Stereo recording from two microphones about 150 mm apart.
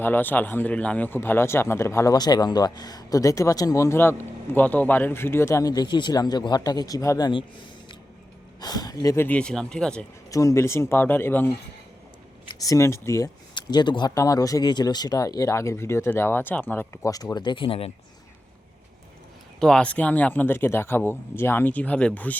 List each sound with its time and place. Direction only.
0.0 s speech: 15° left (ahead or behind)
8.6 s speech: 25° left (ahead or behind); by 10.1 s 5° left (ahead or behind)
10.3 s speech: 20° left (ahead or behind)
12.5 s speech: 25° left (ahead or behind)
13.5 s speech: 30° left (ahead or behind)
19.5 s speech: 5° left (ahead or behind)